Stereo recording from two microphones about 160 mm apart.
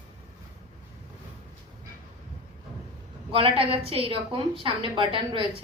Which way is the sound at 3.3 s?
35° right (ahead or behind).